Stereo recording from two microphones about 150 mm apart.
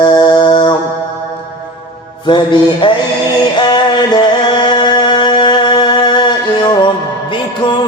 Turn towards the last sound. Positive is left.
turn(degrees=30)  # may be behind; listen again after turning